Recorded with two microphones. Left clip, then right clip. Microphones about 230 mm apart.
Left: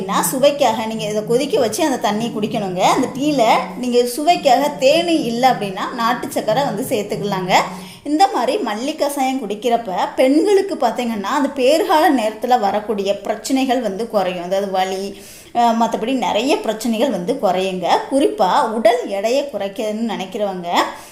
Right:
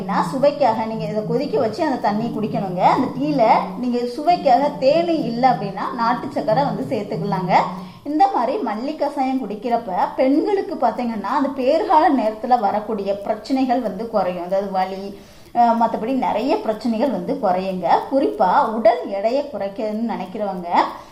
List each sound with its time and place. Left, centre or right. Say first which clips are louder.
0.1 s a woman's voice: left 2 dB; left
8.6 s a woman's voice: left 3 dB; left